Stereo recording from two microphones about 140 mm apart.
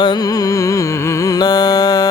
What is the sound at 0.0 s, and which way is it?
Music, 30° left (ahead or behind).